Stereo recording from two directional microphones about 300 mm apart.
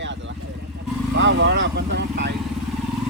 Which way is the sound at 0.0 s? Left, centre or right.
Right.